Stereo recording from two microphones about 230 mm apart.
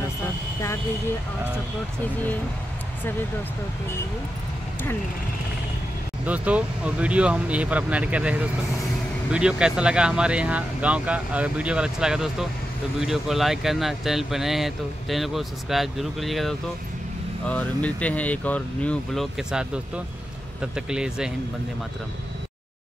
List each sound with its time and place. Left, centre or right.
6.2 s speech: centre